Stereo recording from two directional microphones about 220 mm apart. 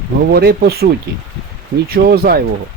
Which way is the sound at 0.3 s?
45° right (ahead or behind).